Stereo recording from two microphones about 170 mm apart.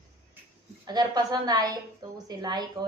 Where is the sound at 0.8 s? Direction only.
25° right (ahead or behind).